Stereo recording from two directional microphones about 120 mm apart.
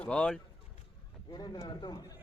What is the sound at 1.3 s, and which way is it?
Speech, 35° left (ahead or behind).